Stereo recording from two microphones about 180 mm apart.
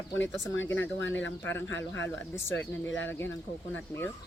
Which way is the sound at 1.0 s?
90° left.